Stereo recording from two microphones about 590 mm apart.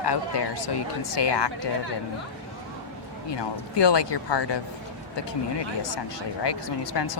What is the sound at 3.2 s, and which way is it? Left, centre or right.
Speech, left.